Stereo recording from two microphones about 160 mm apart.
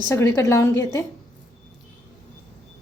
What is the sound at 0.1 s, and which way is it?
Speech, 15° left (ahead or behind).